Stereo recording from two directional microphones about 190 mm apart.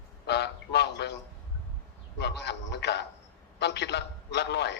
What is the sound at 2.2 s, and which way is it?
A man's voice, 65° left (ahead or behind).